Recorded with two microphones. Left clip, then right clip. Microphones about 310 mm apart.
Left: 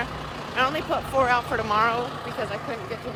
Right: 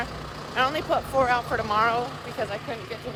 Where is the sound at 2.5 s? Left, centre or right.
Centre.